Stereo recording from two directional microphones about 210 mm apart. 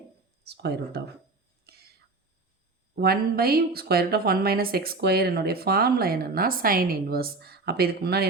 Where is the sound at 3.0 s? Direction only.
45° right (ahead or behind).